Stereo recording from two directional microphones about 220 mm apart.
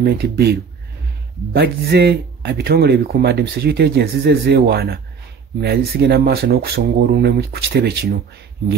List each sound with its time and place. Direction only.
0.0 s a man's voice: 45° right (ahead or behind)